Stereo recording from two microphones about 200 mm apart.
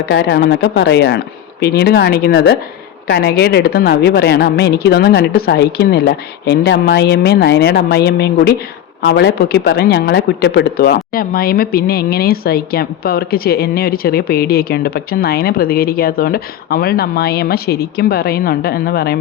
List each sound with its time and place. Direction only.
0.0 s speech: 55° left (ahead or behind)